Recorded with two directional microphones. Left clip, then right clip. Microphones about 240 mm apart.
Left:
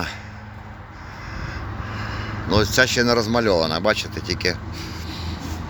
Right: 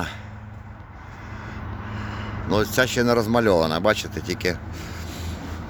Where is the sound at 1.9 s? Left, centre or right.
Centre.